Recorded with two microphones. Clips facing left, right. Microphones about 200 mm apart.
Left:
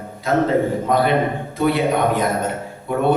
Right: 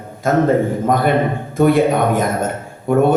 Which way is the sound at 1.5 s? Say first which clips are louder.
Right 5 dB; 50° right (ahead or behind).